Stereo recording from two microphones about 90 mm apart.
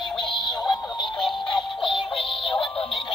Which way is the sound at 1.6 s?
Centre (ahead or behind).